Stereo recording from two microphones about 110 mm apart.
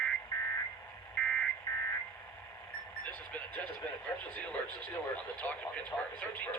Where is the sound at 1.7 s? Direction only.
35° left (ahead or behind).